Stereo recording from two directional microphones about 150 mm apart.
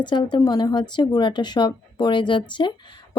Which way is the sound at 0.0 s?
30° left (ahead or behind).